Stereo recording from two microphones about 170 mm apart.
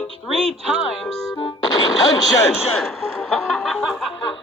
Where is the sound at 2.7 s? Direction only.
Centre (ahead or behind).